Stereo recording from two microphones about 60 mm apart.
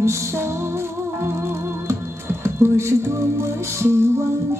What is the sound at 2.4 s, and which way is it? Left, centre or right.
Music, right.